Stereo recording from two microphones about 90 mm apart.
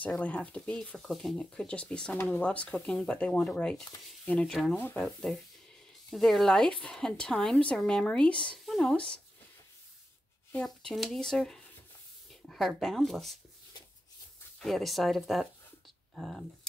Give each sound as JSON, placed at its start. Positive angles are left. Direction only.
{"t": 0.2, "sound": "speech", "side_deg": 15}
{"t": 0.6, "sound": "a woman's voice", "side_deg": 5}
{"t": 4.7, "sound": "speech", "side_deg": 20}
{"t": 5.0, "sound": "a woman's voice", "side_deg": 5}
{"t": 8.6, "sound": "a sound", "side_deg": 0}
{"t": 8.9, "sound": "speech", "side_deg": 10}
{"t": 10.5, "sound": "speech", "side_deg": 10}
{"t": 14.6, "sound": "a woman's voice", "side_deg": 0}